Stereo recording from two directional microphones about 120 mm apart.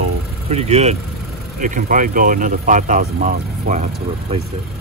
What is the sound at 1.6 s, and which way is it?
Speech, 90° right.